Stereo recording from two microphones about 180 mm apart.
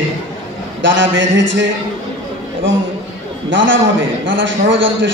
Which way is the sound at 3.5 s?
90° right.